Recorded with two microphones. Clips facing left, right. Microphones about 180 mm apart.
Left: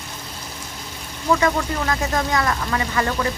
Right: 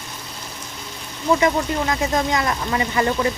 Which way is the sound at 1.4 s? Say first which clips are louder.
Right 2 dB; 20° right (ahead or behind).